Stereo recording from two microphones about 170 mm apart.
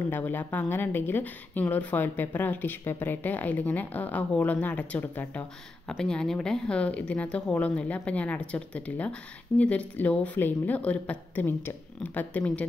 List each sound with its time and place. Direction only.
0.1 s speech: 10° left (ahead or behind)